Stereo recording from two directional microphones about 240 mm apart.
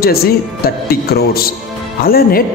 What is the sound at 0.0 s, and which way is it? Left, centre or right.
A man's voice, left.